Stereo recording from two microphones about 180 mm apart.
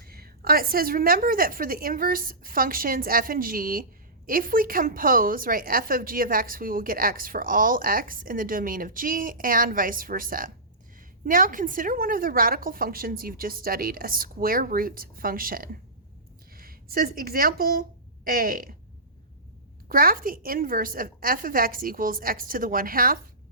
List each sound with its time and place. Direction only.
0.0 s a woman's voice: 60° right (ahead or behind)
19.9 s a woman's voice: 55° right (ahead or behind)